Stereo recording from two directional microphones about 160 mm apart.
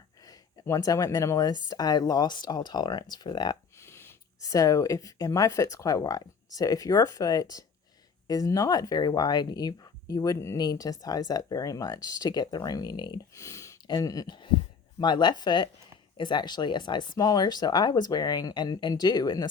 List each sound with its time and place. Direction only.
0.3 s speech: 20° left (ahead or behind)